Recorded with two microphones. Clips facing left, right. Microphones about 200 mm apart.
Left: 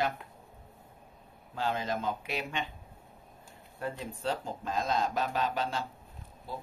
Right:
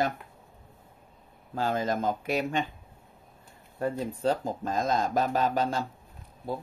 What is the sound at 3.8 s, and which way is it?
Speech, 40° right (ahead or behind).